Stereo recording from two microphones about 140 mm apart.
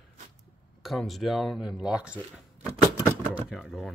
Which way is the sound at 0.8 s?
Centre (ahead or behind).